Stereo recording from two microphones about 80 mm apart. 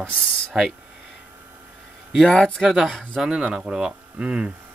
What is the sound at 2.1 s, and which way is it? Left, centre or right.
Speech, centre.